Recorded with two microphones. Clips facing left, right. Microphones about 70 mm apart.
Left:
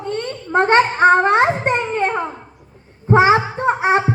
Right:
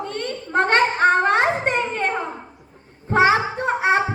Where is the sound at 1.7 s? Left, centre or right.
Left.